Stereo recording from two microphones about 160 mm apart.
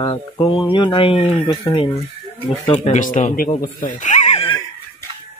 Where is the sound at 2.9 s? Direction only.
50° left (ahead or behind).